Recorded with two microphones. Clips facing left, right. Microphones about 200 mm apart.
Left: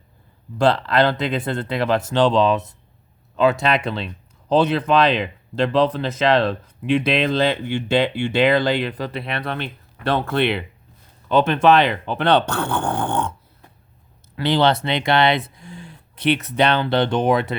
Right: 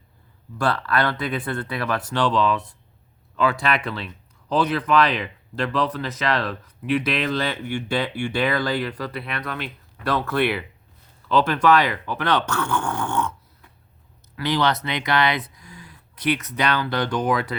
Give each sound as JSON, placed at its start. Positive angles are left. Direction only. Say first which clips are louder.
{"t": 0.6, "sound": "speech", "louder": "left 6 dB", "side_deg": 20}